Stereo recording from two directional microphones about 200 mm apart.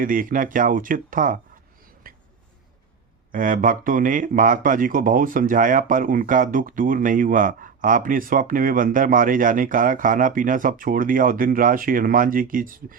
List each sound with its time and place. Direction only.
0.0 s speech: 45° right (ahead or behind)
2.0 s a sound: 45° right (ahead or behind)
3.3 s speech: 45° right (ahead or behind)